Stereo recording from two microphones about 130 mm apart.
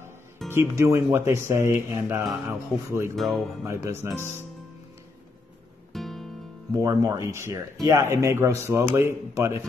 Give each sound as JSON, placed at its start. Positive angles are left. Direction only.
{"t": 0.5, "sound": "speech", "side_deg": -20}
{"t": 3.2, "sound": "speech", "side_deg": 0}
{"t": 3.6, "sound": "speech", "side_deg": -20}
{"t": 5.9, "sound": "music", "side_deg": 0}
{"t": 6.7, "sound": "speech", "side_deg": -25}